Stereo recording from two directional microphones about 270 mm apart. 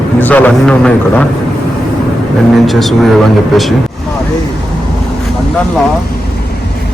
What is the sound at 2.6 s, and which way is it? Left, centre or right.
Speech, centre.